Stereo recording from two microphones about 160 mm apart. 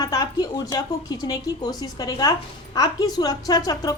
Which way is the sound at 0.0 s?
25° left (ahead or behind).